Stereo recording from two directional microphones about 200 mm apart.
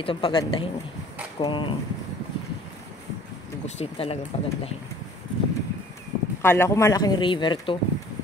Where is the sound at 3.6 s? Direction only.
30° left (ahead or behind).